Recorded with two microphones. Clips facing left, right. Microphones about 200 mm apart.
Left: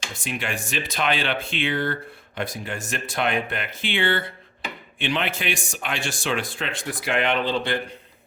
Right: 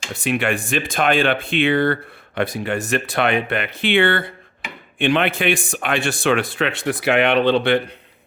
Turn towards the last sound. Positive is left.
turn(degrees=-65)  # may be behind; listen again after turning